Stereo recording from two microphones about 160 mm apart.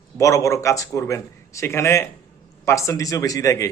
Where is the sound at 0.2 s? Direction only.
20° left (ahead or behind).